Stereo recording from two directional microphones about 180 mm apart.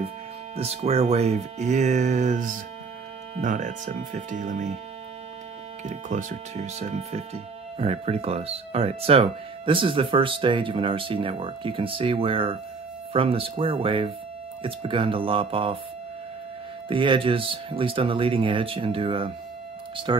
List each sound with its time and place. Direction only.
0.6 s speech: 35° right (ahead or behind)
5.9 s speech: 45° right (ahead or behind)
16.9 s speech: 30° right (ahead or behind)